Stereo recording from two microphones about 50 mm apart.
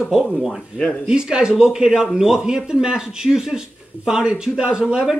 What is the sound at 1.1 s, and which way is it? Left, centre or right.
Speech, centre.